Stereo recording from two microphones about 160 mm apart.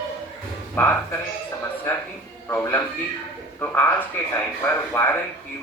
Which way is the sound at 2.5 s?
15° left (ahead or behind).